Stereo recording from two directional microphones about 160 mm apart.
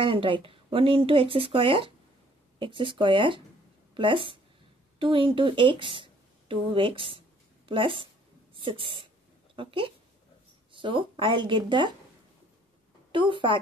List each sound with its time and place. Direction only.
0.0 s speech: 30° right (ahead or behind)
13.1 s speech: 30° right (ahead or behind)